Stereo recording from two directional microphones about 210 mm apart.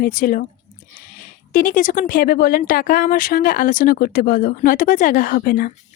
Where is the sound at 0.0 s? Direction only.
45° left (ahead or behind).